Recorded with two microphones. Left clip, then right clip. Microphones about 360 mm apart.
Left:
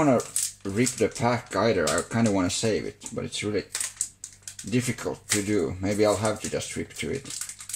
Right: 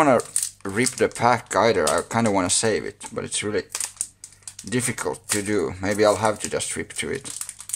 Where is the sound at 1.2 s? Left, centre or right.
Centre.